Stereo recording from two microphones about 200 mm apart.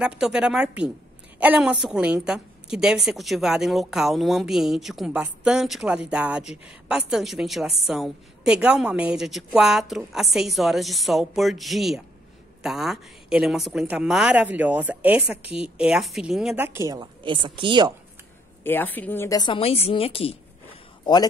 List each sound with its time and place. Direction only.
0.0 s a woman's voice: 5° right (ahead or behind); by 17.9 s 25° right (ahead or behind)
18.6 s a woman's voice: 10° left (ahead or behind)